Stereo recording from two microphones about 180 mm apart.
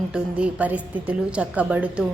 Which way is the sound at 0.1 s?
5° right (ahead or behind).